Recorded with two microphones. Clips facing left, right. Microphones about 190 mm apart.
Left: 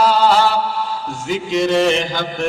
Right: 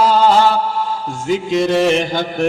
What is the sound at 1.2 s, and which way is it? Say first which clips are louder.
Chant: right 3 dB; 50° right (ahead or behind).